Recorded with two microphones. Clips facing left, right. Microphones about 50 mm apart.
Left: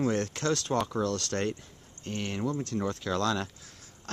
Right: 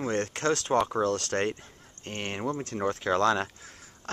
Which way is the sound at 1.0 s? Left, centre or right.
Right.